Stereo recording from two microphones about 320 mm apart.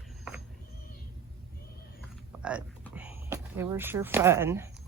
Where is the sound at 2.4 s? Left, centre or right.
Centre.